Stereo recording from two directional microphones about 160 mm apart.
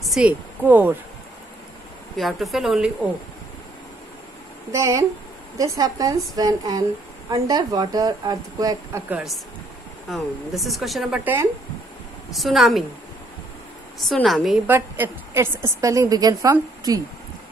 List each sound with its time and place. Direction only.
0.0 s a woman's voice: 5° right (ahead or behind)
2.1 s speech: centre (ahead or behind)
4.7 s a woman's voice: 20° right (ahead or behind)
9.1 s speech: centre (ahead or behind)
12.4 s speech: centre (ahead or behind)
13.9 s speech: centre (ahead or behind)
14.7 s a woman's voice: 15° right (ahead or behind)